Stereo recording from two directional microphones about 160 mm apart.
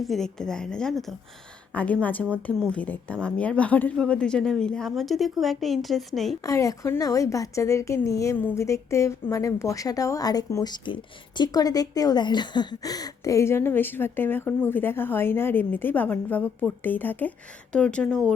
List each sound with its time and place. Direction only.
0.0 s a woman's voice: centre (ahead or behind)
6.4 s speech: 20° left (ahead or behind)